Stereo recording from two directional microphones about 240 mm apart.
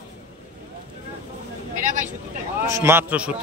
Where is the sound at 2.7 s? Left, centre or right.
Centre.